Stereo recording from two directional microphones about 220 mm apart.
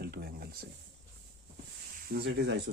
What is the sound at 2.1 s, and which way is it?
Speech, 50° right (ahead or behind).